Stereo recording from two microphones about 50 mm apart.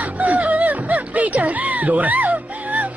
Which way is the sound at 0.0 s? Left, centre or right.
Right.